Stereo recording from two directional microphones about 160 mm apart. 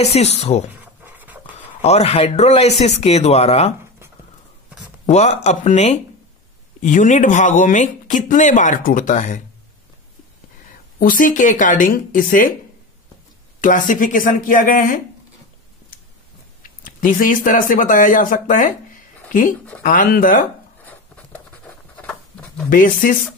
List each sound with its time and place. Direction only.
0.0 s speech: 40° left (ahead or behind)
1.0 s writing: 10° right (ahead or behind)
1.8 s speech: 40° left (ahead or behind)
5.0 s speech: 45° left (ahead or behind)
11.0 s speech: 55° left (ahead or behind)
13.6 s speech: 55° left (ahead or behind)
16.8 s speech: 55° left (ahead or behind)
19.8 s speech: 60° left (ahead or behind)
22.7 s speech: 60° left (ahead or behind)